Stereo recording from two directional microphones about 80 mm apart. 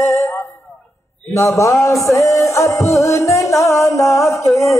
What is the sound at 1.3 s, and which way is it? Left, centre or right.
Music, left.